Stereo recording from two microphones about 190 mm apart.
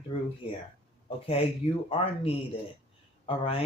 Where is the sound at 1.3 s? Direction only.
30° left (ahead or behind).